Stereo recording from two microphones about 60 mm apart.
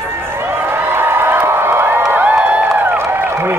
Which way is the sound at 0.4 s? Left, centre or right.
Right.